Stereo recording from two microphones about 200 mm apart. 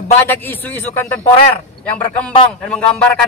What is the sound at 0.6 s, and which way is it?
Speech, 10° left (ahead or behind).